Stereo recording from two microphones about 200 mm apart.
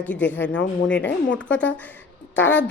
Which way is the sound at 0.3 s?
65° left (ahead or behind).